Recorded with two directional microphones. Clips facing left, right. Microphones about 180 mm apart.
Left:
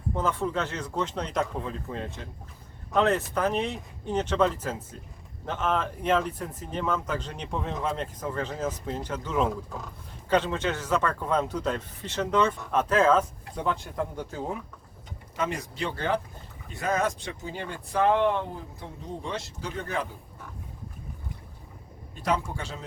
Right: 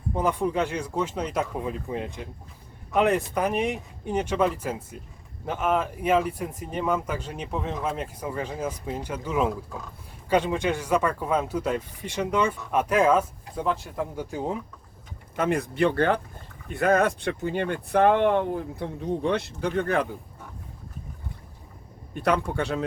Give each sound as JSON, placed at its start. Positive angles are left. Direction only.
{"t": 0.1, "sound": "speech", "side_deg": -15}
{"t": 15.4, "sound": "speech", "side_deg": -55}
{"t": 22.1, "sound": "speech", "side_deg": -60}